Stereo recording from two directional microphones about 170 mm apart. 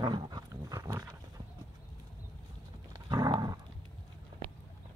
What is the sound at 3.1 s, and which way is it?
Dog, 25° right (ahead or behind).